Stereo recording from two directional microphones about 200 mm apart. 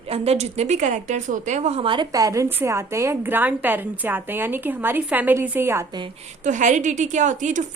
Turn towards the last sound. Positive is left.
turn(degrees=-40)  # may be behind; listen again after turning